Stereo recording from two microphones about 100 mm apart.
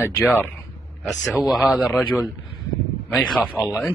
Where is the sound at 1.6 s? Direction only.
15° right (ahead or behind).